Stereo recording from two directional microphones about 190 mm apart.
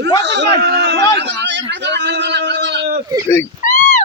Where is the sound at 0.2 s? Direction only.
65° right (ahead or behind).